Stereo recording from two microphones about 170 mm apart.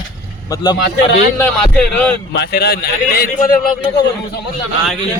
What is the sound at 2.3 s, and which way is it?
A man's voice, 75° left (ahead or behind).